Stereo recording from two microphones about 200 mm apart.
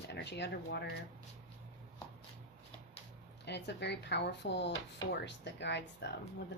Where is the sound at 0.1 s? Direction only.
60° left (ahead or behind).